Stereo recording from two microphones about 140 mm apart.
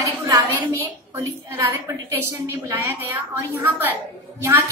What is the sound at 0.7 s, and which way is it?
A woman's voice, 25° right (ahead or behind).